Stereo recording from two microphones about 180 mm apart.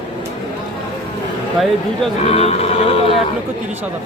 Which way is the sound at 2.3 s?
35° left (ahead or behind).